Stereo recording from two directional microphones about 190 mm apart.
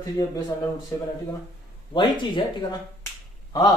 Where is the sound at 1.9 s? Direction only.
25° left (ahead or behind).